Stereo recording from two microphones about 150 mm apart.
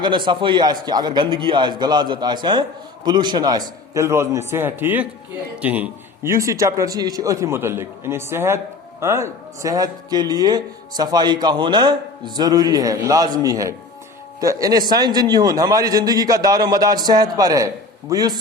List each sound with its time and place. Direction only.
0.0 s a man's voice: 30° right (ahead or behind)